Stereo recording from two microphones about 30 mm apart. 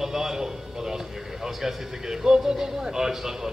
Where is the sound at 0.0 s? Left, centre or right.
Centre.